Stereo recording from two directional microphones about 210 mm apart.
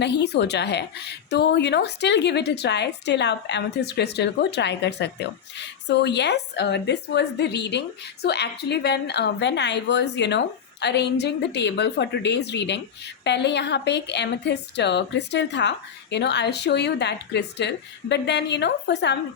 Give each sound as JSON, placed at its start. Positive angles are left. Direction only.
{"t": 0.0, "sound": "a woman's voice", "side_deg": 55}